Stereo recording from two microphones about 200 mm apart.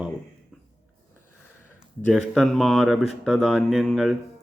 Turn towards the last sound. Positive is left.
turn(degrees=0)  # may be behind; listen again after turning